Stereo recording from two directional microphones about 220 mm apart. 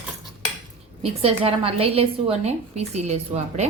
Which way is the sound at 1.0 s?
25° right (ahead or behind).